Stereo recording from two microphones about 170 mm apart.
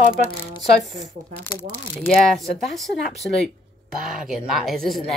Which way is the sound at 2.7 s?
Centre (ahead or behind).